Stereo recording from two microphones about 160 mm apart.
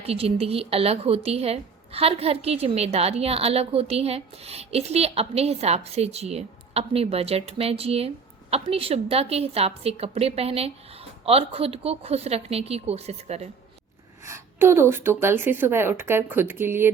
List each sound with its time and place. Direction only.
0.0 s speech: 40° right (ahead or behind)
14.3 s a woman's voice: 15° right (ahead or behind)